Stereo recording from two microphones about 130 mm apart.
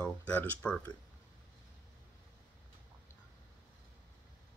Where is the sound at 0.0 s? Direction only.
15° left (ahead or behind).